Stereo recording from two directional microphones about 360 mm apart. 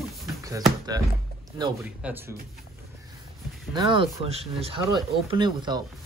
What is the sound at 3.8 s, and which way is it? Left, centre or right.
Speech, centre.